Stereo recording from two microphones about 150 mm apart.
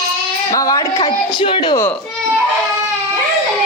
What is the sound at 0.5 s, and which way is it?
Speech, 25° left (ahead or behind).